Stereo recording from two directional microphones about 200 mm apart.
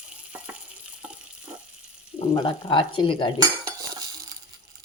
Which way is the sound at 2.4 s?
25° left (ahead or behind).